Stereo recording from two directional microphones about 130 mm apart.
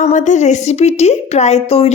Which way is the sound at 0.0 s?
80° left.